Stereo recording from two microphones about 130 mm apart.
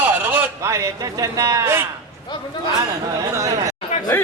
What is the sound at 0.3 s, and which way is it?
A man's voice, 25° right (ahead or behind).